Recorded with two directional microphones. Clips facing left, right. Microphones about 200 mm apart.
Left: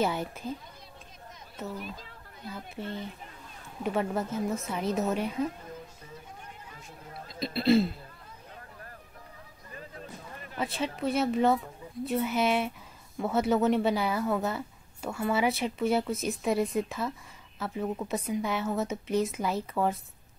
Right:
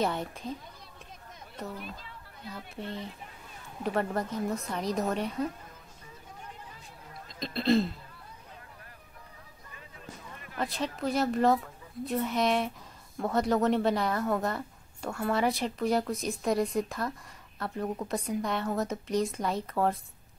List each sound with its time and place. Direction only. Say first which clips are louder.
0.0 s a woman's voice: left 1 dB; 5° left (ahead or behind)
3.8 s a woman's voice: left 1 dB; 5° left (ahead or behind)
7.3 s throat clearing: left 2 dB; 5° left (ahead or behind)
9.8 s a sound: left 5 dB; 40° left (ahead or behind)
10.6 s a woman's voice: left 1 dB; centre (ahead or behind)